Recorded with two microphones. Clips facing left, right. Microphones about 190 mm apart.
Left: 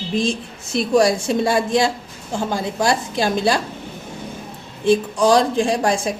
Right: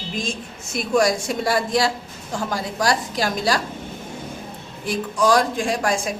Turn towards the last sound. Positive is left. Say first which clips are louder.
# left 3 dB
turn(degrees=30)  # may be behind; listen again after turning